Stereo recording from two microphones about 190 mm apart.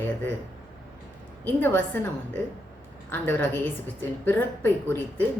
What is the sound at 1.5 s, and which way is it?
Speech, 10° left (ahead or behind).